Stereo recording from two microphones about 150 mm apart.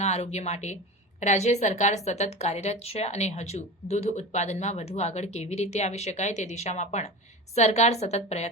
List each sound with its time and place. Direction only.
0.0 s a woman's voice: 45° left (ahead or behind)